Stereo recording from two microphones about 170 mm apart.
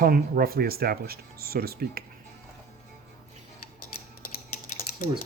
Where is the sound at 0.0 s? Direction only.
60° right (ahead or behind).